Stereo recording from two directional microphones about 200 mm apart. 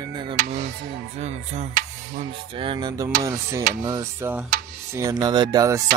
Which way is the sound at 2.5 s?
25° right (ahead or behind).